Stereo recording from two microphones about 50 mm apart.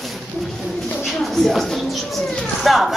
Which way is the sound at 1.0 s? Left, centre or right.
Centre.